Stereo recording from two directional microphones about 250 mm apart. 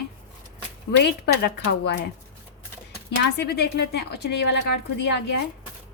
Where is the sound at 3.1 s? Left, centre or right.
Left.